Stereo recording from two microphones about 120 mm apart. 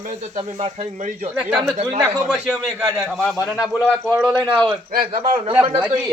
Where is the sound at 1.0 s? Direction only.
90° right.